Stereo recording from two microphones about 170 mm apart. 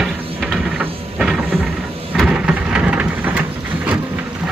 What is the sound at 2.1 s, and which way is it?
Thunder, 5° right (ahead or behind).